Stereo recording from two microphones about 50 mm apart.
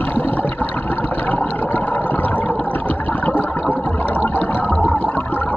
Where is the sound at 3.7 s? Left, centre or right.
Left.